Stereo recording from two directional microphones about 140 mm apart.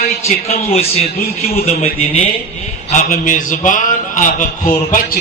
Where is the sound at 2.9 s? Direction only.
65° left (ahead or behind).